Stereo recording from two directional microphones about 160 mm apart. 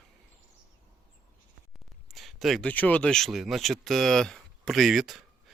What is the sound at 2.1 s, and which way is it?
Speech, centre (ahead or behind).